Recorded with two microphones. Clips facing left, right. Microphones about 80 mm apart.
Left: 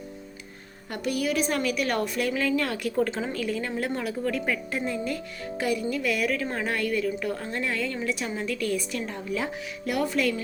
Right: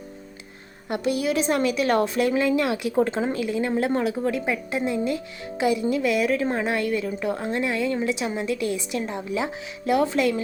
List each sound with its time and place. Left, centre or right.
0.9 s speech: right
2.9 s a woman's voice: right
3.4 s speech: centre